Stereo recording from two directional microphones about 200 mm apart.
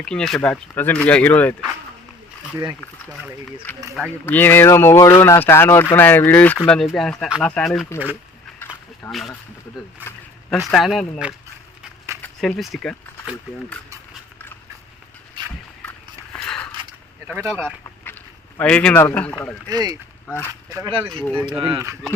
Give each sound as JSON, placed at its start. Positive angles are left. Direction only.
{"t": 0.0, "sound": "speech", "side_deg": 5}
{"t": 3.9, "sound": "speech", "side_deg": 5}
{"t": 7.9, "sound": "speech", "side_deg": 15}
{"t": 8.5, "sound": "a sound", "side_deg": 5}
{"t": 10.6, "sound": "speech", "side_deg": 0}
{"t": 15.8, "sound": "biting", "side_deg": 5}
{"t": 17.2, "sound": "speech", "side_deg": -15}
{"t": 18.0, "sound": "a man's voice", "side_deg": 10}
{"t": 19.7, "sound": "speech", "side_deg": -20}
{"t": 20.2, "sound": "speech", "side_deg": 10}
{"t": 20.7, "sound": "speech", "side_deg": -15}